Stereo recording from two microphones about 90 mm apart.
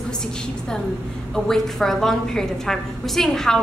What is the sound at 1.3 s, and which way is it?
A woman's voice, 5° left (ahead or behind).